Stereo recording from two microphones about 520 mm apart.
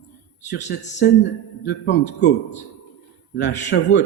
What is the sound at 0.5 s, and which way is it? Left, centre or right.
A man's voice, centre.